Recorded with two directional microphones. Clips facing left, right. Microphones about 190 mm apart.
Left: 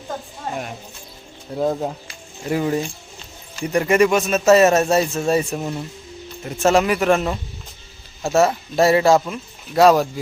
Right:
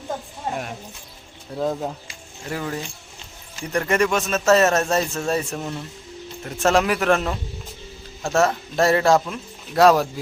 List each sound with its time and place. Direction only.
0.5 s speech: centre (ahead or behind)
1.5 s a man's voice: 15° left (ahead or behind)